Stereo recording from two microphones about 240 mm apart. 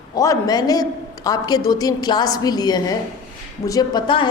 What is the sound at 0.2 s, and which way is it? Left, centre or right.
A woman's voice, centre.